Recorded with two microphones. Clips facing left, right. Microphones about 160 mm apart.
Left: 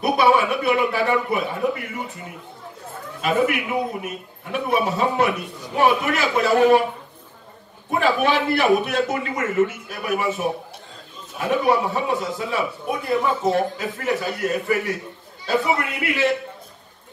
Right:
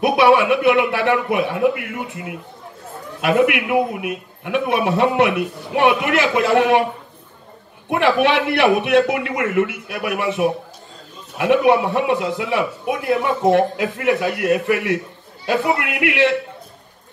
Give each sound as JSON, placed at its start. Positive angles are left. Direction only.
{"t": 0.2, "sound": "a man's voice", "side_deg": -70}
{"t": 3.2, "sound": "a man's voice", "side_deg": -65}
{"t": 7.9, "sound": "a man's voice", "side_deg": -70}